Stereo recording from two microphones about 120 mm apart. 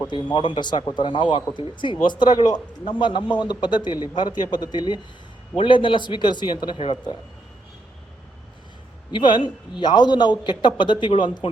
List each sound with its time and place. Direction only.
0.1 s speech: 40° left (ahead or behind)
6.7 s a man's voice: 55° left (ahead or behind)
9.1 s speech: 40° left (ahead or behind)